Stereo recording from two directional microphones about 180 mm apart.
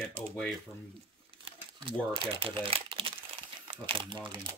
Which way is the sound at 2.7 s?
30° right (ahead or behind).